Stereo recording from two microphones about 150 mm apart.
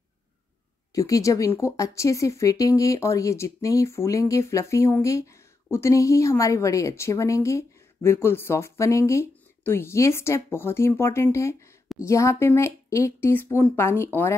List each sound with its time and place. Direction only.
0.9 s speech: 20° left (ahead or behind)